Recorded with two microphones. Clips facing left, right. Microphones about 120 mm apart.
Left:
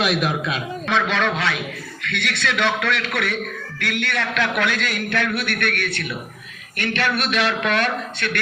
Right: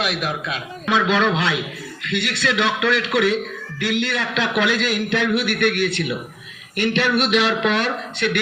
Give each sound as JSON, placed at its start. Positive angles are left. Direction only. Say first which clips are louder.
{"t": 0.0, "sound": "a man's voice", "louder": "left 3 dB", "side_deg": 80}
{"t": 0.9, "sound": "a man's voice", "louder": "right 3 dB", "side_deg": -10}